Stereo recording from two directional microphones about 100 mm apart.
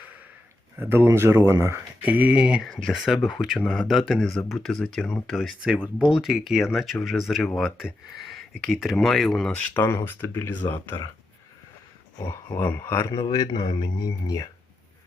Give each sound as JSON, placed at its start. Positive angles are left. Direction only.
{"t": 0.8, "sound": "speech", "side_deg": -20}
{"t": 9.7, "sound": "speech", "side_deg": 25}
{"t": 12.3, "sound": "speech", "side_deg": 25}
{"t": 13.3, "sound": "speech", "side_deg": 45}